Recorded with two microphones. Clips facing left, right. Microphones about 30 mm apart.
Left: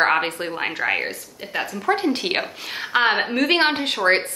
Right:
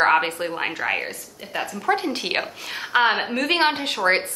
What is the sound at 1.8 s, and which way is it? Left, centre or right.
A woman's voice, centre.